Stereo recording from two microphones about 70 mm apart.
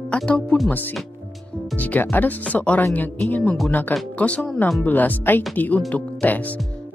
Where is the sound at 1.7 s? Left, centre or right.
Left.